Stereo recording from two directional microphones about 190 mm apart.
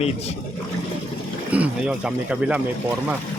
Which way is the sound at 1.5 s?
5° right (ahead or behind).